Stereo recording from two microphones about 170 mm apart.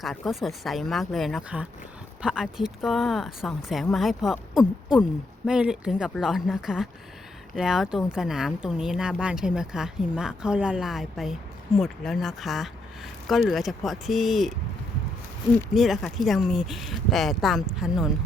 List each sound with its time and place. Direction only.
0.0 s speech: centre (ahead or behind)
15.7 s speech: centre (ahead or behind)